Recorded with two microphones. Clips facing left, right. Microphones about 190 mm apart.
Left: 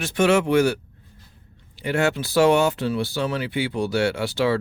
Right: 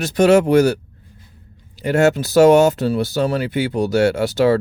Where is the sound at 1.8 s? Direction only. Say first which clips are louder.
Right 7 dB; 40° right (ahead or behind).